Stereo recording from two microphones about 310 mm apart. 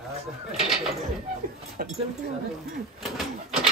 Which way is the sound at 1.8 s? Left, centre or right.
Right.